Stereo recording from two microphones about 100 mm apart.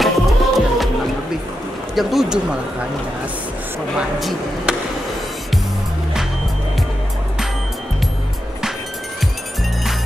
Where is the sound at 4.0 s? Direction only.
5° right (ahead or behind).